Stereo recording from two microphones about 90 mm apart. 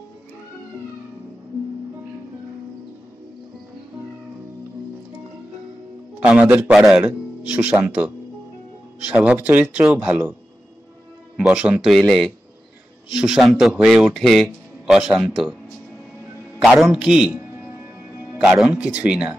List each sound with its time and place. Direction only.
6.1 s a man's voice: 15° right (ahead or behind)
11.3 s speech: 10° right (ahead or behind)
16.6 s speech: centre (ahead or behind)
18.4 s speech: 15° right (ahead or behind)